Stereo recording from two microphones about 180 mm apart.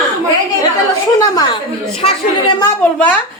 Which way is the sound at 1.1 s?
20° left (ahead or behind).